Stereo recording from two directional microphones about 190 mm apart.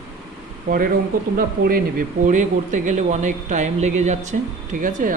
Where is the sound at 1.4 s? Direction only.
50° right (ahead or behind).